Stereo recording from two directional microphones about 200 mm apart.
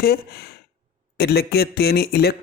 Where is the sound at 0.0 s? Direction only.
50° left (ahead or behind).